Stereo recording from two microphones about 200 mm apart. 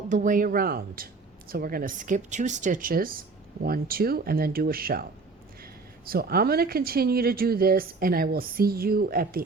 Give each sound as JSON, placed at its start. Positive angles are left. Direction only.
{"t": 0.1, "sound": "speech", "side_deg": -40}